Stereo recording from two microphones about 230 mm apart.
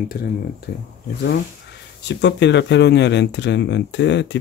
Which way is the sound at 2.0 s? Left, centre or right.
Left.